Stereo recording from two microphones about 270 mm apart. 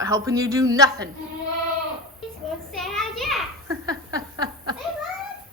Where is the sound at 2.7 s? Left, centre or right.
Centre.